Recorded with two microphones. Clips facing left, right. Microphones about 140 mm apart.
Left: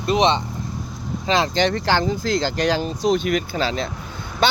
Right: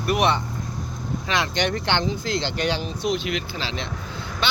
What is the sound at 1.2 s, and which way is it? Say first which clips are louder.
Speech: left 6 dB; 30° left (ahead or behind).